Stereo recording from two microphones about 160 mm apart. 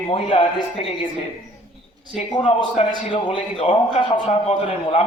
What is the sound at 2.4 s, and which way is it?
A man's voice, 40° left (ahead or behind).